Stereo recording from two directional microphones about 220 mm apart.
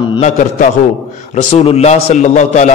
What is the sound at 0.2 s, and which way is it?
A man's voice, 35° left (ahead or behind).